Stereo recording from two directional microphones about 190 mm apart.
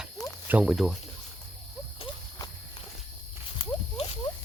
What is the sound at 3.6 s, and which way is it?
Clip-clop, 30° left (ahead or behind).